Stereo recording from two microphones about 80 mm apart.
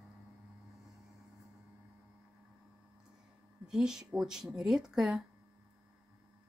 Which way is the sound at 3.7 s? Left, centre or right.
Centre.